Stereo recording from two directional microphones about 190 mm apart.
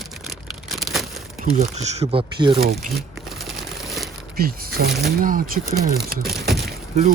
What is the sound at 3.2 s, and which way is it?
Crumpling, centre (ahead or behind).